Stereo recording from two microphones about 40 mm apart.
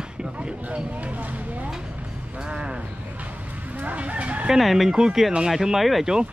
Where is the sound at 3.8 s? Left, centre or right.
Right.